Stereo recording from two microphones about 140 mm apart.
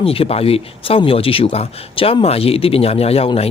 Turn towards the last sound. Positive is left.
turn(degrees=45)  # may be behind; listen again after turning